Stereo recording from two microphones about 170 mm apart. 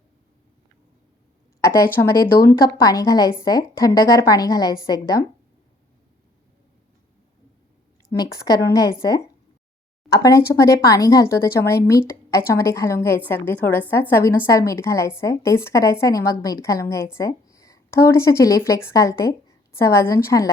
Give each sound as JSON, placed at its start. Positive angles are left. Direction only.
{"t": 1.6, "sound": "a woman's voice", "side_deg": 15}
{"t": 8.2, "sound": "a woman's voice", "side_deg": 20}